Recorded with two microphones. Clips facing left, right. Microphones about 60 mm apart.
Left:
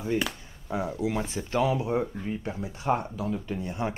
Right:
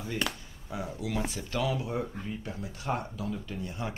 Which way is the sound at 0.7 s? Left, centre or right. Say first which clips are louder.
Left 6 dB; left.